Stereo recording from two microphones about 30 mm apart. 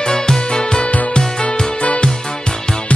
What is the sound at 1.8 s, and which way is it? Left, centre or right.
Music, left.